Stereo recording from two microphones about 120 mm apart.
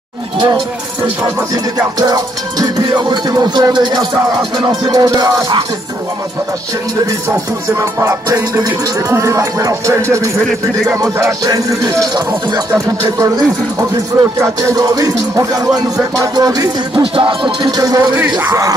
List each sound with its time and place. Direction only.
2.0 s music: 30° right (ahead or behind)
8.0 s speech: 30° right (ahead or behind)
13.9 s speech: 25° right (ahead or behind)
17.0 s music: 45° right (ahead or behind)